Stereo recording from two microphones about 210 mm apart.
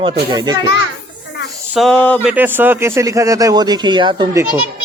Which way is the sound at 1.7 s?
5° left (ahead or behind).